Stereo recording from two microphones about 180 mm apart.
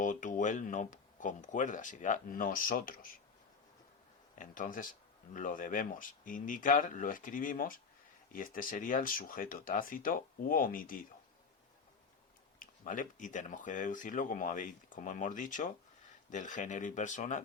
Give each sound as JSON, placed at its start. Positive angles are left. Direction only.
{"t": 0.0, "sound": "speech", "side_deg": 45}
{"t": 4.4, "sound": "speech", "side_deg": 45}
{"t": 12.5, "sound": "speech", "side_deg": 45}